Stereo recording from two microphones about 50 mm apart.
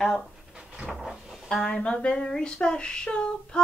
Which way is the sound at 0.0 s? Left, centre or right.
Centre.